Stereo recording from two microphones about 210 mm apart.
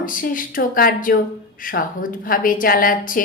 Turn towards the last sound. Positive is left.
turn(degrees=40)  # may be behind; listen again after turning